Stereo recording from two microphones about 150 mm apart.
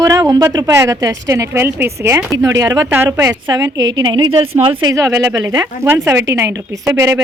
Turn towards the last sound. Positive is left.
turn(degrees=-20)  # may be behind; listen again after turning